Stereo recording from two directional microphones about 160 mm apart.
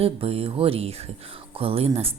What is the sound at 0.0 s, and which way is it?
Speech, 35° right (ahead or behind).